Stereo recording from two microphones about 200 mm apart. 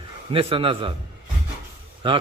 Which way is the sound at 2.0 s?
25° right (ahead or behind).